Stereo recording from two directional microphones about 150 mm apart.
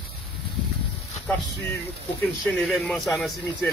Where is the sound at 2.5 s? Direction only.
Centre (ahead or behind).